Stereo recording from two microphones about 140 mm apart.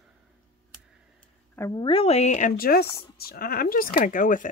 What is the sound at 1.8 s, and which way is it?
Speech, 40° left (ahead or behind).